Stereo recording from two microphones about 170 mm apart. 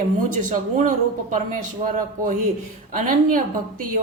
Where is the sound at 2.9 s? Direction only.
50° right (ahead or behind).